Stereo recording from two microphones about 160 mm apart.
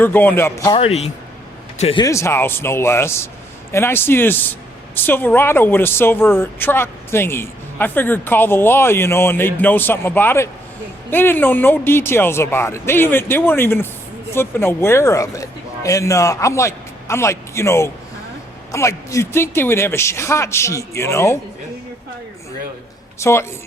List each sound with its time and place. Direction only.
0.0 s speech: 10° left (ahead or behind)
0.7 s speech: 40° left (ahead or behind)
2.0 s speech: 15° left (ahead or behind)
23.2 s speech: 15° left (ahead or behind)